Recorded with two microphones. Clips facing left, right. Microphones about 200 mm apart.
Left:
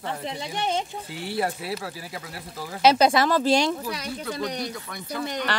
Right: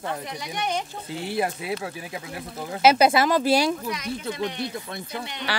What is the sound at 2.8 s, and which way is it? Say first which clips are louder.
Speech: right 1 dB; 5° right (ahead or behind).